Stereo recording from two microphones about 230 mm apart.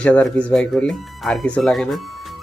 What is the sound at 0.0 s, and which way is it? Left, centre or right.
Speech, centre.